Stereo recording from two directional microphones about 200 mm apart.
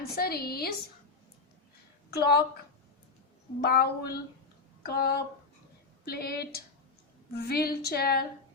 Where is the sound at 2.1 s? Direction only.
50° left (ahead or behind).